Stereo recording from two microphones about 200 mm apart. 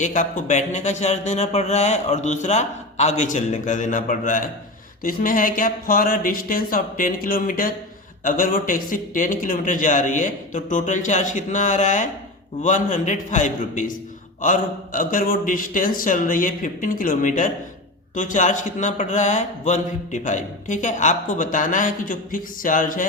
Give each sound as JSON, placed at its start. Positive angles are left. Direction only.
{"t": 0.0, "sound": "a man's voice", "side_deg": 40}